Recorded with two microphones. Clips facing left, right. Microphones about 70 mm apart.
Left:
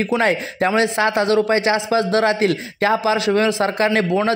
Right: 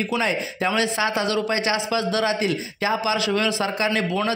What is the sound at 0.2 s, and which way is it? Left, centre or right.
Speech, left.